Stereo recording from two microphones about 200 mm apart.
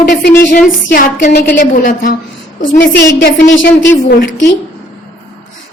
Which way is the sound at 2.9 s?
65° left (ahead or behind).